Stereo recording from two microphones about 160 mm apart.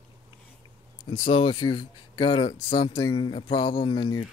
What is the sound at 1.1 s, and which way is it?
Speech, 30° left (ahead or behind).